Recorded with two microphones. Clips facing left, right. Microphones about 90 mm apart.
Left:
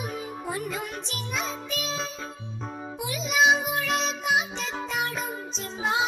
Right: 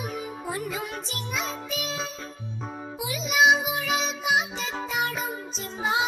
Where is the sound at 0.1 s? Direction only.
Centre (ahead or behind).